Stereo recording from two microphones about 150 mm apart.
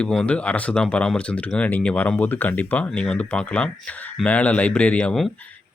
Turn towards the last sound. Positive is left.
turn(degrees=5)  # may be behind; listen again after turning